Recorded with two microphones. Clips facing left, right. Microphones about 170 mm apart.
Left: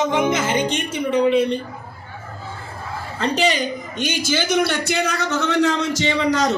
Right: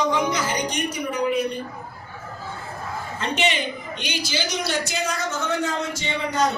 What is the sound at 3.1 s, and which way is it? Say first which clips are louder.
A man's voice: left 5 dB; 35° left (ahead or behind).